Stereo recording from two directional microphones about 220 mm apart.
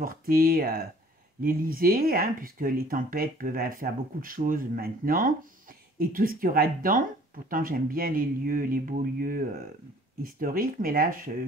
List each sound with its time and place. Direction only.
0.0 s speech: 40° right (ahead or behind)